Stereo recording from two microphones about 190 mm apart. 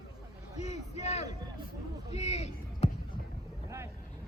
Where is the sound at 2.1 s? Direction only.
35° left (ahead or behind).